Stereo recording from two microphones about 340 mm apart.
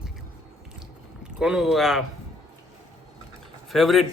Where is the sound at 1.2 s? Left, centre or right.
Centre.